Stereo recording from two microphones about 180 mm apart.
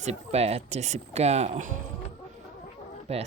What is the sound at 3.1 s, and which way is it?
Speech, 35° right (ahead or behind).